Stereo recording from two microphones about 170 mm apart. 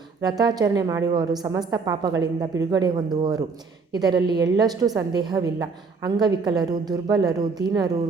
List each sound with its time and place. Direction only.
0.2 s a woman's voice: 25° right (ahead or behind)